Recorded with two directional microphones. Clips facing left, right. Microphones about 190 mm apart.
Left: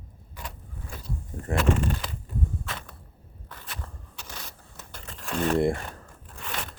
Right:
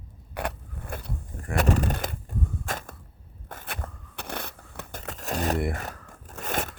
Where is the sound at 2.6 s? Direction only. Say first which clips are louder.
Right 4 dB; 45° right (ahead or behind).